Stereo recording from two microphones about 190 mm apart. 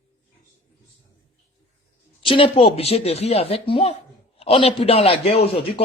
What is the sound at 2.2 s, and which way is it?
Speech, 30° left (ahead or behind).